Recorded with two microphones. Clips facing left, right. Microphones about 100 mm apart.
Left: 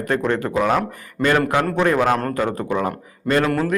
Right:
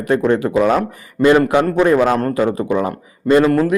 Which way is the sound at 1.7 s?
10° right (ahead or behind).